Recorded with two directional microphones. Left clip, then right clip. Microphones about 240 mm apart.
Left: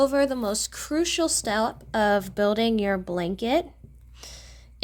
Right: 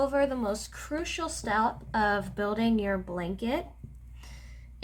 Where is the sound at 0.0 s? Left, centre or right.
Left.